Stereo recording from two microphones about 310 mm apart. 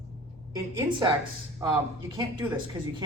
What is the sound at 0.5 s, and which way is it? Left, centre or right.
A woman's voice, centre.